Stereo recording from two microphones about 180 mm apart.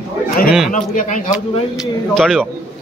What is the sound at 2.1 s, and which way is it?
Speech, centre (ahead or behind).